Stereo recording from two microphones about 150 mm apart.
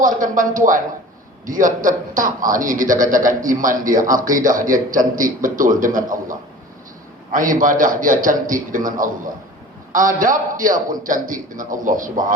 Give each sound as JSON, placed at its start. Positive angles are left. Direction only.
{"t": 0.0, "sound": "speech", "side_deg": -65}
{"t": 7.3, "sound": "speech", "side_deg": -65}